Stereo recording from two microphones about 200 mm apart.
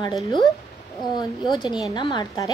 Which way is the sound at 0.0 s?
20° left (ahead or behind).